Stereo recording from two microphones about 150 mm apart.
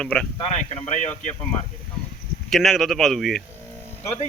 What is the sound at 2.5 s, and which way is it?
Speech, centre (ahead or behind).